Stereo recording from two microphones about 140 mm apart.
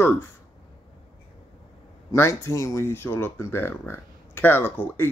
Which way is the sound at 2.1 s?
20° left (ahead or behind).